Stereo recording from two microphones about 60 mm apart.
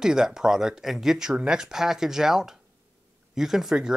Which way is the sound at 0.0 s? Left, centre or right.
Centre.